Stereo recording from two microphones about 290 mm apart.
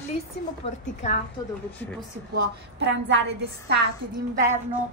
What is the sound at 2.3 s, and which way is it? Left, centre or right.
A woman's voice, right.